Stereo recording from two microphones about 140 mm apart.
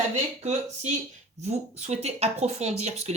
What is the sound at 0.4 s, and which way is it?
Speech, 55° right (ahead or behind).